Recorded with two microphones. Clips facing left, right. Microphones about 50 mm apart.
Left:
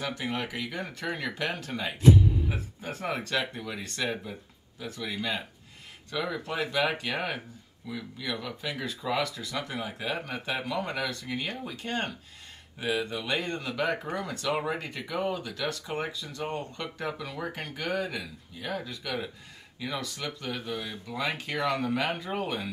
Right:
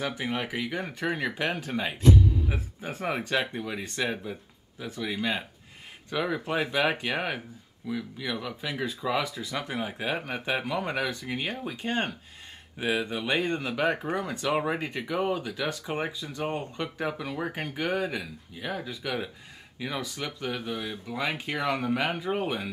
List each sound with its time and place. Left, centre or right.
0.0 s speech: centre